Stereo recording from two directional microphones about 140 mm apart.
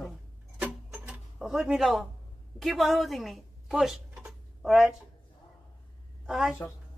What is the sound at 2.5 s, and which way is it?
Speech, centre (ahead or behind).